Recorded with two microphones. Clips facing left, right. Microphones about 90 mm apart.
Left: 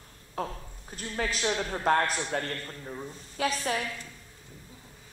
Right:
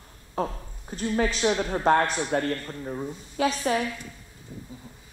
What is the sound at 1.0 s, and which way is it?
Speech, 20° right (ahead or behind).